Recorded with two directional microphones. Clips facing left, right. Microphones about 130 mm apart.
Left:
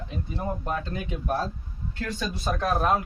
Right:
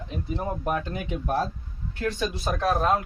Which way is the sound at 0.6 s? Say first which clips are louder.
Right 2 dB; 15° right (ahead or behind).